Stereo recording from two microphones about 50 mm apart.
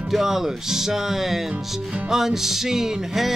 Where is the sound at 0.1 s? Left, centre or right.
Centre.